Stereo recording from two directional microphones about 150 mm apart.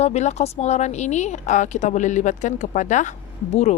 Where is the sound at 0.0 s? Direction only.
50° left (ahead or behind).